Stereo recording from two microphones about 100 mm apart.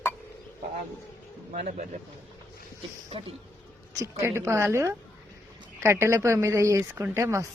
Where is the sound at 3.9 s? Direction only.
30° right (ahead or behind).